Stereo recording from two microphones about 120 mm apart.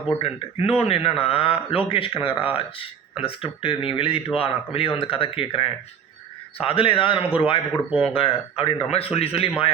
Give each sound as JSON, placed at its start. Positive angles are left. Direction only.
{"t": 0.2, "sound": "a man's voice", "side_deg": 55}
{"t": 7.9, "sound": "speech", "side_deg": -10}
{"t": 8.1, "sound": "a man's voice", "side_deg": 50}